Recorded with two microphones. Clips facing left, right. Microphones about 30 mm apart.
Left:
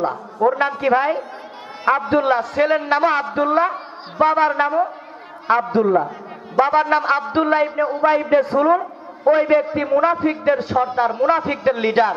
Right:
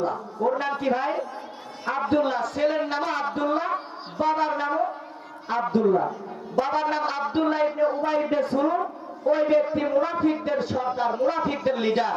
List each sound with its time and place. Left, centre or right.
0.4 s a man's voice: left